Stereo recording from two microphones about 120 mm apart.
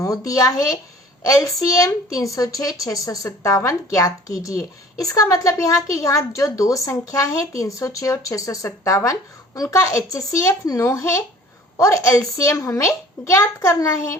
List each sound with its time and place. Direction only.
0.0 s a woman's voice: 30° left (ahead or behind)